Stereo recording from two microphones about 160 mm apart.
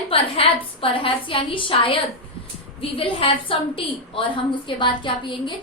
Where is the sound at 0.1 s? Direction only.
35° left (ahead or behind).